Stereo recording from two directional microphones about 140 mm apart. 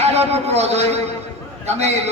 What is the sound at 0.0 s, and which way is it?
A man's voice, 50° right (ahead or behind).